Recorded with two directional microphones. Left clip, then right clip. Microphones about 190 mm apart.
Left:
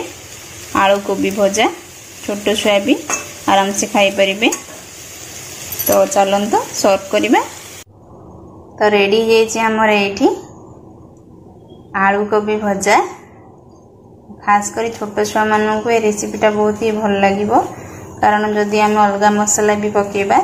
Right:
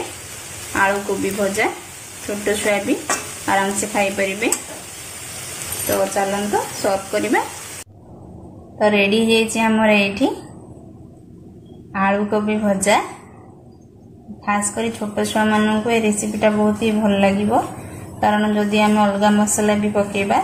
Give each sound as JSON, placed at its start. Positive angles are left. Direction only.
{"t": 0.7, "sound": "speech", "side_deg": 30}
{"t": 6.8, "sound": "speech", "side_deg": 35}
{"t": 8.8, "sound": "a woman's voice", "side_deg": 0}
{"t": 11.9, "sound": "a woman's voice", "side_deg": 10}
{"t": 14.4, "sound": "a woman's voice", "side_deg": 10}